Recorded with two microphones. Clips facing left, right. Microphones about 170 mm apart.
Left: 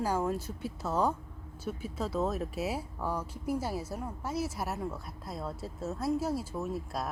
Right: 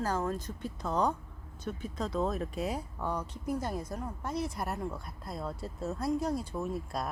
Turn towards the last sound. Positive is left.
turn(degrees=0)  # may be behind; listen again after turning